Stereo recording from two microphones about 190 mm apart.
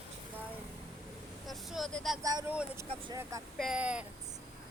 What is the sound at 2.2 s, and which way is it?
Speech, 20° right (ahead or behind).